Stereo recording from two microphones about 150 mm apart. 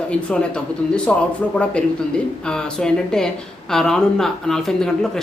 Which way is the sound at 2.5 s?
5° left (ahead or behind).